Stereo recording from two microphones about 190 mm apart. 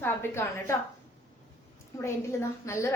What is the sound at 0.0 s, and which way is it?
Speech, 15° left (ahead or behind).